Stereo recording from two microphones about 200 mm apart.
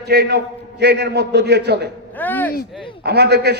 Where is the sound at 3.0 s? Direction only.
55° right (ahead or behind).